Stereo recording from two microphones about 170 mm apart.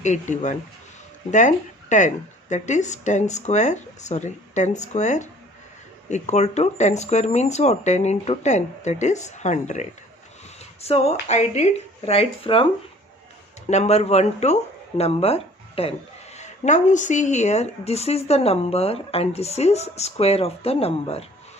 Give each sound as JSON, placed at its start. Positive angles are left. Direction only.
{"t": 0.0, "sound": "speech", "side_deg": 45}
{"t": 13.7, "sound": "speech", "side_deg": 40}